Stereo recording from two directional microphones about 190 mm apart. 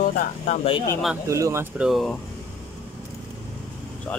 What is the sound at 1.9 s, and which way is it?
Speech, centre (ahead or behind).